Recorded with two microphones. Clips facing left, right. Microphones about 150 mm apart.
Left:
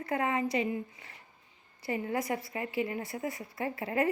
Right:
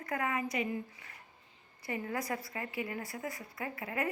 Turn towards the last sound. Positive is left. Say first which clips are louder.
# left 6 dB
turn(degrees=30)  # may be behind; listen again after turning